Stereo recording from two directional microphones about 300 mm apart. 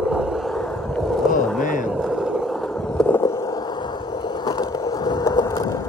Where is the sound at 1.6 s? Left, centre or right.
Left.